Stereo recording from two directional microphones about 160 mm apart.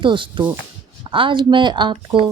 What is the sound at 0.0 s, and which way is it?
A woman's voice, 30° right (ahead or behind).